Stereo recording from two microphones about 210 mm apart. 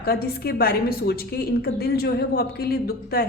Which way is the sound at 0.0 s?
45° left (ahead or behind).